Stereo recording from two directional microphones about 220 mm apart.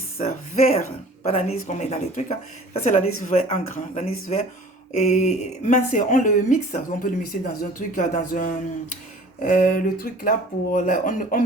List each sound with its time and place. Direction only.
0.2 s speech: 30° left (ahead or behind)